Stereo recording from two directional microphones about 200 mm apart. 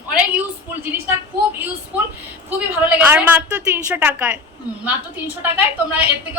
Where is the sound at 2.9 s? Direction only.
10° right (ahead or behind).